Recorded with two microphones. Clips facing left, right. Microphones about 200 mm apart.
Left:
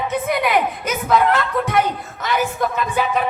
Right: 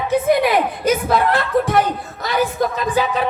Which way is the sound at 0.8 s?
35° right (ahead or behind).